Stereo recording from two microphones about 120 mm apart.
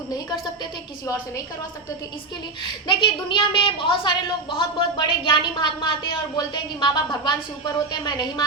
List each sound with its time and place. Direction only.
2.8 s a woman's voice: 45° left (ahead or behind)